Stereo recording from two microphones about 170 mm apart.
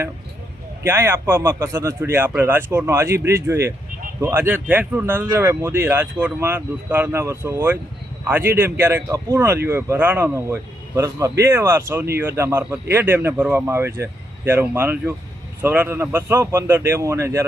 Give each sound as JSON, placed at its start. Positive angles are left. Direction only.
{"t": 0.9, "sound": "speech", "side_deg": -15}